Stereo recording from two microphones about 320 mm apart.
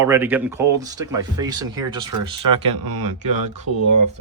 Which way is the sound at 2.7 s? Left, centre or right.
Right.